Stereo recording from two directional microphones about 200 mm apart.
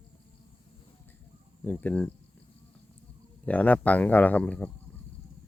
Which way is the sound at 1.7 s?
10° left (ahead or behind).